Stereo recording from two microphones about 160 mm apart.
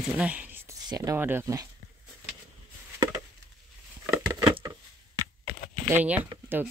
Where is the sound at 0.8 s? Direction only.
20° right (ahead or behind).